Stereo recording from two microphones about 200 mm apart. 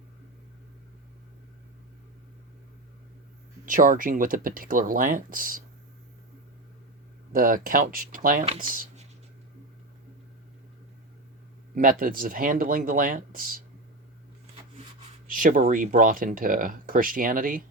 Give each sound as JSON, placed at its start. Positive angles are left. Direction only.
{"t": 3.7, "sound": "speech", "side_deg": -45}
{"t": 7.3, "sound": "speech", "side_deg": -45}
{"t": 11.7, "sound": "speech", "side_deg": -45}
{"t": 15.3, "sound": "speech", "side_deg": -45}